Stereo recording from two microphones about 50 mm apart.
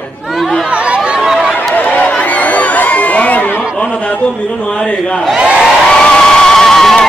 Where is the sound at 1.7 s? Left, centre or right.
Left.